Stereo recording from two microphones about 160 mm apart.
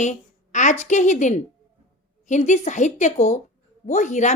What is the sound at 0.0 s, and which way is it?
A woman's voice, 50° left (ahead or behind).